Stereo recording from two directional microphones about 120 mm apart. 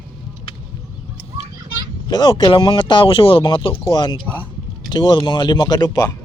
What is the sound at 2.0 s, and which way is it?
Speech, 40° left (ahead or behind).